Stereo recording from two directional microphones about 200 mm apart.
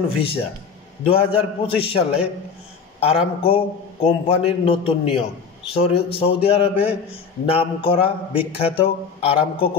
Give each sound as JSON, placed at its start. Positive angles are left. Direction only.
{"t": 0.2, "sound": "a man's voice", "side_deg": 30}